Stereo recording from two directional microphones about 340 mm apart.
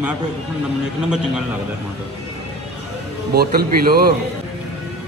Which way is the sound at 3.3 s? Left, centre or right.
Right.